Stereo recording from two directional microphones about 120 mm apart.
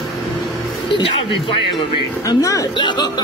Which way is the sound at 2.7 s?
40° left (ahead or behind).